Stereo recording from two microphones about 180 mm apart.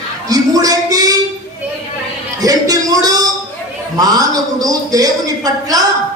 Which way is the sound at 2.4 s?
20° right (ahead or behind).